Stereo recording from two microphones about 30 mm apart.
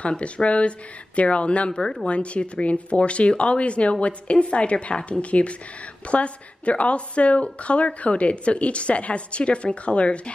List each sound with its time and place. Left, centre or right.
0.2 s a woman's voice: left